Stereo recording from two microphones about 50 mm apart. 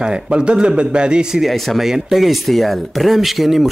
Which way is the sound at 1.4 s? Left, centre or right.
Centre.